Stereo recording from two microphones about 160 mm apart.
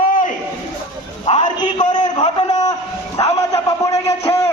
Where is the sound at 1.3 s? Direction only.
40° left (ahead or behind).